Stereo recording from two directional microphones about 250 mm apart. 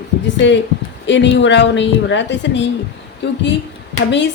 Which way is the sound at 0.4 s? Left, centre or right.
Left.